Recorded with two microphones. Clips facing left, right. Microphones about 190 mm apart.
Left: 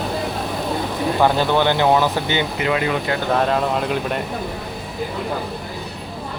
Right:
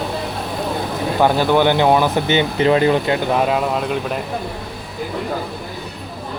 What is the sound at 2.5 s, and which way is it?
Speech, 30° right (ahead or behind).